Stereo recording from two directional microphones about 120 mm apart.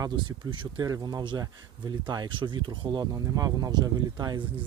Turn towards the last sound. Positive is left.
turn(degrees=-30)  # may be behind; listen again after turning